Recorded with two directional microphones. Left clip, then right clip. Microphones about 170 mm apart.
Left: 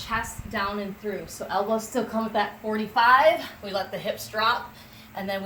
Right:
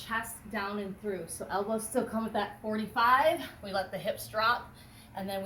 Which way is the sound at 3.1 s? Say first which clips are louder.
Left 7 dB; 5° right (ahead or behind).